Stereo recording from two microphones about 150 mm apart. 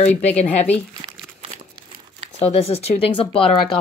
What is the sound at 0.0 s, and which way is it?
Speech, 45° left (ahead or behind).